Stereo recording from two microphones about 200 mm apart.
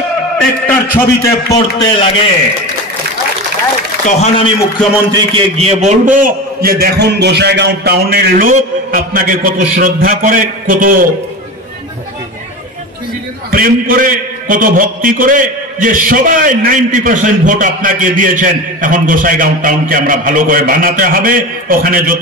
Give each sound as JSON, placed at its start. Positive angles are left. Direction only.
{"t": 0.4, "sound": "a man's voice", "side_deg": 5}
{"t": 1.5, "sound": "a man's voice", "side_deg": 20}
{"t": 4.0, "sound": "a man's voice", "side_deg": 35}
{"t": 5.3, "sound": "a man's voice", "side_deg": -30}
{"t": 13.5, "sound": "a man's voice", "side_deg": -45}